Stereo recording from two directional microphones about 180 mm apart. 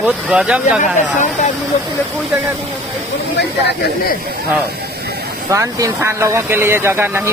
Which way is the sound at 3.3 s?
65° left (ahead or behind).